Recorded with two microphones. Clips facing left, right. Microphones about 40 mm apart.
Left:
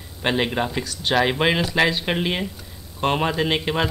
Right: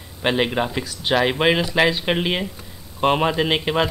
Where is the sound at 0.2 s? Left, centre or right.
Centre.